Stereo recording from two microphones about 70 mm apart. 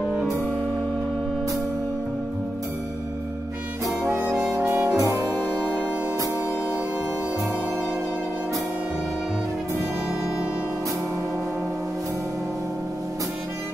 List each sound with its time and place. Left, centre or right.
4.6 s music: right